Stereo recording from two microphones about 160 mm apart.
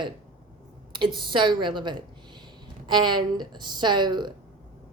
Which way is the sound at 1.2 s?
30° right (ahead or behind).